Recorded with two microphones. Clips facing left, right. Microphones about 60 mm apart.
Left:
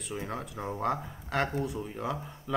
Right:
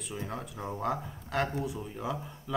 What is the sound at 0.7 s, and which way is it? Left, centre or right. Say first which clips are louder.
Speech: left 2 dB; centre.